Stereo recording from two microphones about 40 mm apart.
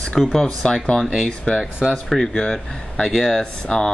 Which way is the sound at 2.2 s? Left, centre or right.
Left.